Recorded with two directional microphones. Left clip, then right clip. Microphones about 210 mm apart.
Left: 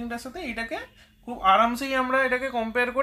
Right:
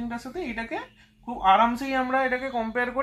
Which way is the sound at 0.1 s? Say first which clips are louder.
Even; 20° left (ahead or behind).